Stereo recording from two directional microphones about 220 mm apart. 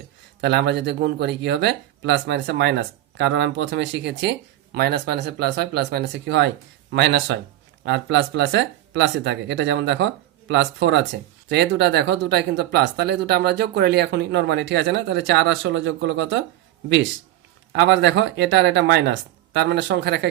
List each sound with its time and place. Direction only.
0.4 s speech: 50° right (ahead or behind)
17.7 s speech: 55° right (ahead or behind)